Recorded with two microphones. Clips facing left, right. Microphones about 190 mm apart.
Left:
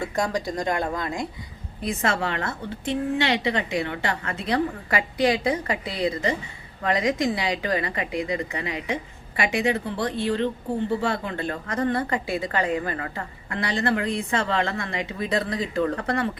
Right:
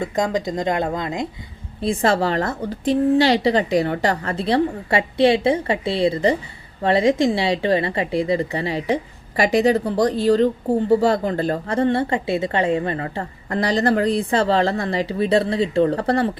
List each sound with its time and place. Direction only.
0.0 s a woman's voice: 20° right (ahead or behind)